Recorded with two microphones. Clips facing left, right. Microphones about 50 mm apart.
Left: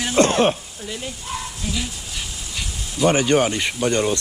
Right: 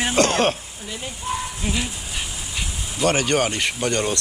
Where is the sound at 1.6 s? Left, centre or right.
Right.